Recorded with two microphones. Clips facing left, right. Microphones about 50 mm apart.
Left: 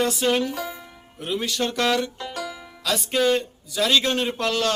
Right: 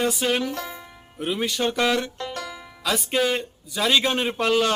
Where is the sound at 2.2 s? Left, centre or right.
Centre.